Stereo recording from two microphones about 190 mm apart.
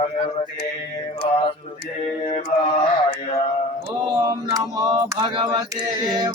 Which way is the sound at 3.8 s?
15° right (ahead or behind).